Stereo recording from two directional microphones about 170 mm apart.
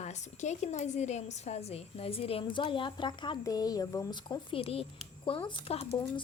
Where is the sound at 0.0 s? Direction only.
40° left (ahead or behind).